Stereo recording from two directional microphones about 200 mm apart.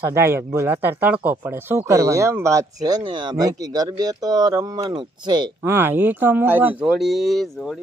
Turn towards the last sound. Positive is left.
turn(degrees=0)  # may be behind; listen again after turning